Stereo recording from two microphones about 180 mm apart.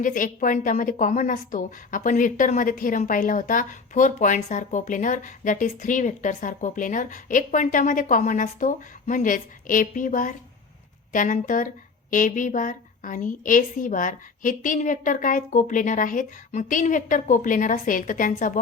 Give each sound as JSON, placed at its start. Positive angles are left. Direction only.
{"t": 0.0, "sound": "a woman's voice", "side_deg": 45}